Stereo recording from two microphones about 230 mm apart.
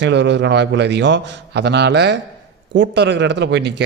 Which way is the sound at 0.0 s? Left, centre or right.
Right.